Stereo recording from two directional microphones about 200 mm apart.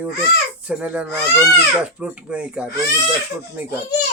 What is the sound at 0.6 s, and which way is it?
Speech, 5° right (ahead or behind).